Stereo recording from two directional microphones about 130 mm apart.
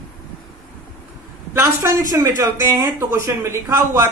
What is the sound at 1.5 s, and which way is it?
A man's voice, 20° right (ahead or behind).